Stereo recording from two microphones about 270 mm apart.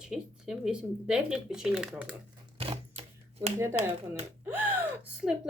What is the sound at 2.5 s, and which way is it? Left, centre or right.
Shuffling cards, right.